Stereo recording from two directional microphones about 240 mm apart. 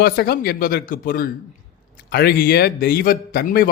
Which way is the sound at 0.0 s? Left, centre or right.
Left.